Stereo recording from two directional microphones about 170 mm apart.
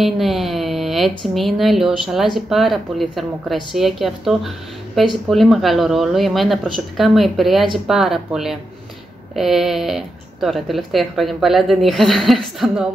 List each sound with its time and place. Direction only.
0.0 s speech: centre (ahead or behind)